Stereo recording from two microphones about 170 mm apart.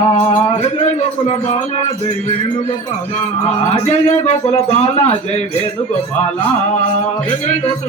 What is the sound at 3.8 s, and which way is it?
A man's voice, 40° left (ahead or behind).